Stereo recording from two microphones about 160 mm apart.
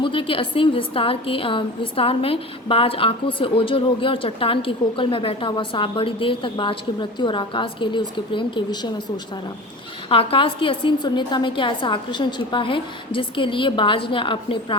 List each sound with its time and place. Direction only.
0.0 s a woman's voice: 30° left (ahead or behind)
10.1 s a woman's voice: 35° left (ahead or behind)